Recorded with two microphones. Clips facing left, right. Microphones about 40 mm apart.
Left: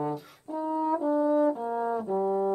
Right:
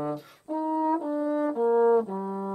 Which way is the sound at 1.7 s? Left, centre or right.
Centre.